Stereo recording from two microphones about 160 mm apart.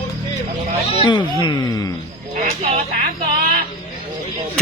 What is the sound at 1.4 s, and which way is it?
Speech, 25° left (ahead or behind).